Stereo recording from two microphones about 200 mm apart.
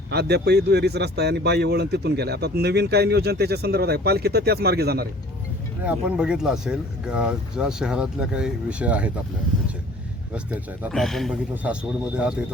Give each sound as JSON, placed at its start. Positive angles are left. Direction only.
{"t": 0.1, "sound": "speech", "side_deg": -55}
{"t": 5.8, "sound": "speech", "side_deg": -5}
{"t": 10.3, "sound": "speech", "side_deg": -5}